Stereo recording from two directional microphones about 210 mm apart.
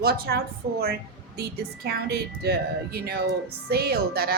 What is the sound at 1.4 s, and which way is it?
A woman's voice, 45° right (ahead or behind).